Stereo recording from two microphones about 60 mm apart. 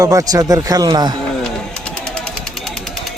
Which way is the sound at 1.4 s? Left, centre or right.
Centre.